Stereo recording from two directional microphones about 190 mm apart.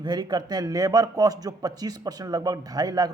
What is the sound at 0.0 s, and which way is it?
A man's voice, 20° right (ahead or behind).